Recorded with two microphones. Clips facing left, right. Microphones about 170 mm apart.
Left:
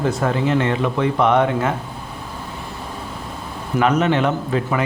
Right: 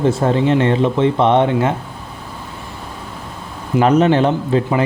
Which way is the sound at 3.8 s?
35° right (ahead or behind).